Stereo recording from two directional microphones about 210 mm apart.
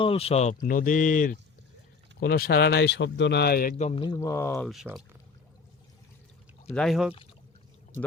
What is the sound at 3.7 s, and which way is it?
Speech, 30° left (ahead or behind).